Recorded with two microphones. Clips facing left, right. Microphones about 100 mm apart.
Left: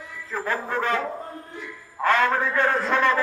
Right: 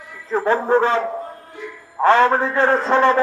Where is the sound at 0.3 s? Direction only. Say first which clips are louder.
Right 10 dB; 30° right (ahead or behind).